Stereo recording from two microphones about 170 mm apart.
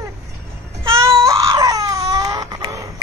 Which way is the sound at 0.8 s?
15° right (ahead or behind).